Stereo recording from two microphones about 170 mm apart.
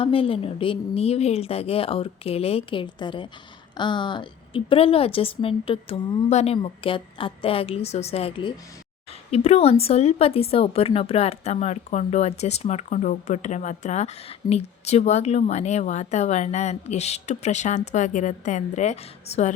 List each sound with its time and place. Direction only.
0.0 s a woman's voice: 35° left (ahead or behind)